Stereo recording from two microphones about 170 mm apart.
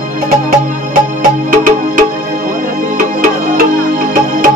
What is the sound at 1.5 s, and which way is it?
Music, 50° right (ahead or behind).